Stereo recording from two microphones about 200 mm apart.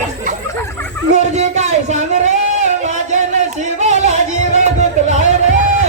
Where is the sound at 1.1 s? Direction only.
35° right (ahead or behind).